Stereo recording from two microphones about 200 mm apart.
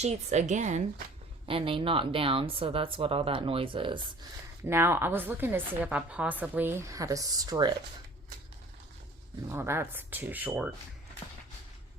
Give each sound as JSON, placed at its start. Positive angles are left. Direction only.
{"t": 0.0, "sound": "a woman's voice", "side_deg": -35}
{"t": 1.5, "sound": "speech", "side_deg": -25}
{"t": 4.6, "sound": "a woman's voice", "side_deg": -10}
{"t": 9.5, "sound": "a woman's voice", "side_deg": -10}